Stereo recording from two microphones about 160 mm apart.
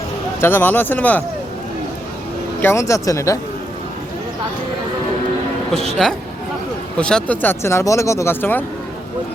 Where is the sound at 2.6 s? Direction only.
15° left (ahead or behind).